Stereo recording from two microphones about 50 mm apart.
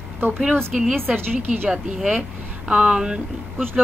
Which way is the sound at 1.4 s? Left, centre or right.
Right.